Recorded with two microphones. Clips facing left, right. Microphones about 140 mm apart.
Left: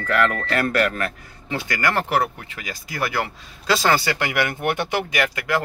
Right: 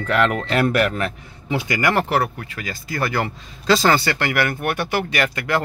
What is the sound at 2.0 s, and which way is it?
Speech, 20° left (ahead or behind).